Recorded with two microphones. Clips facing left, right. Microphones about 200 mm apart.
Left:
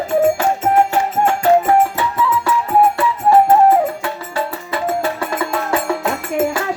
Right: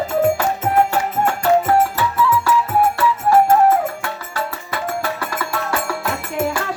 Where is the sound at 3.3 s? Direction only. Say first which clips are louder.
Left 2 dB; 25° left (ahead or behind).